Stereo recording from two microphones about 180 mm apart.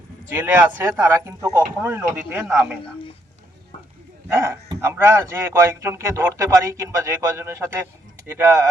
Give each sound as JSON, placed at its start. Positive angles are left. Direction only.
{"t": 0.3, "sound": "speech", "side_deg": -10}
{"t": 4.3, "sound": "speech", "side_deg": -15}